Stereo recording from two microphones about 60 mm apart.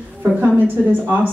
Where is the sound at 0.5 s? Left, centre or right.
Right.